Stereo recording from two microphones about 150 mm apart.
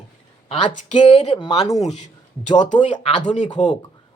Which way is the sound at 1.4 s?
35° left (ahead or behind).